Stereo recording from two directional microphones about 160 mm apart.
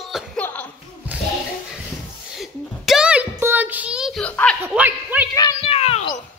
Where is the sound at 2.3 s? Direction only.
Centre (ahead or behind).